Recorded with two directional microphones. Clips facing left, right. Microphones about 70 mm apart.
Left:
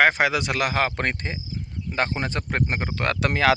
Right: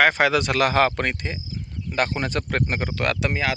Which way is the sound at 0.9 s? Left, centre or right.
Left.